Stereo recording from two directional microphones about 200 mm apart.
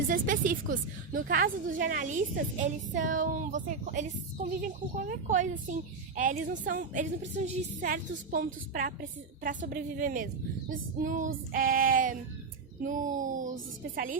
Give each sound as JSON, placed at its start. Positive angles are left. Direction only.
{"t": 0.1, "sound": "a woman's voice", "side_deg": -40}
{"t": 8.7, "sound": "child singing", "side_deg": -45}
{"t": 12.8, "sound": "a woman's voice", "side_deg": -40}
{"t": 13.9, "sound": "child singing", "side_deg": -45}